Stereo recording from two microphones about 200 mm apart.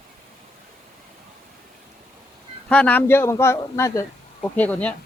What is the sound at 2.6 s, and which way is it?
Speech, 5° left (ahead or behind).